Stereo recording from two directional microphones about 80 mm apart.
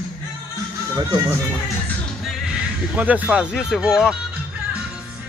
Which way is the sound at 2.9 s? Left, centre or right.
Centre.